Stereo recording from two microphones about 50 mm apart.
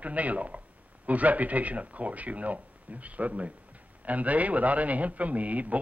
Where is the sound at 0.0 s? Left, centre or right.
Right.